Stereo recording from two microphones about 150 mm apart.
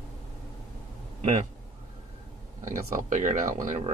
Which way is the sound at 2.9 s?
55° right (ahead or behind).